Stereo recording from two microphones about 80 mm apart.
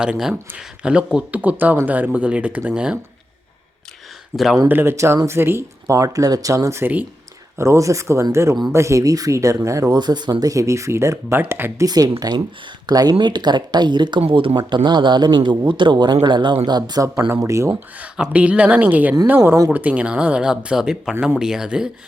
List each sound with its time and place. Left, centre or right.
0.0 s speech: centre
4.3 s speech: right
9.9 s speech: right
10.5 s speech: right
11.3 s speech: right
11.9 s speech: right
17.2 s speech: right
18.3 s speech: centre